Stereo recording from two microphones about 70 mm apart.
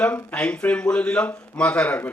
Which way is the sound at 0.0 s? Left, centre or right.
Centre.